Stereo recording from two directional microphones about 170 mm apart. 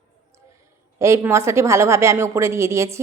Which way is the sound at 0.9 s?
15° right (ahead or behind).